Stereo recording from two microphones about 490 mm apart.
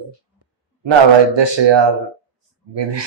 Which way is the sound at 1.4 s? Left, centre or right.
Right.